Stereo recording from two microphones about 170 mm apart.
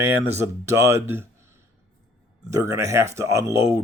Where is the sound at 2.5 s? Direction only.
15° right (ahead or behind).